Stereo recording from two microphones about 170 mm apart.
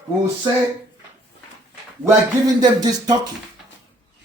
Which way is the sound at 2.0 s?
20° right (ahead or behind).